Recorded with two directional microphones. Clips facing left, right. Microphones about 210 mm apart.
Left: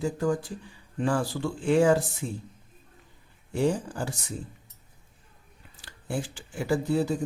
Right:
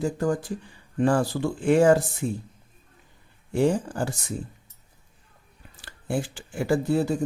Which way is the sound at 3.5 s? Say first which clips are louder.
Right 4 dB; 50° right (ahead or behind).